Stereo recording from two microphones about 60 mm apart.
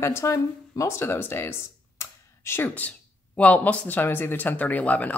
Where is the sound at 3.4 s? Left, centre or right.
Left.